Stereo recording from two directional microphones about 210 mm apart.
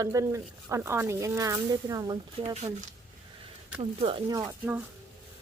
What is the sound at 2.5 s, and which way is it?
Speech, 30° right (ahead or behind).